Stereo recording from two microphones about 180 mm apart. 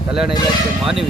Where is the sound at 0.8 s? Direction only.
Centre (ahead or behind).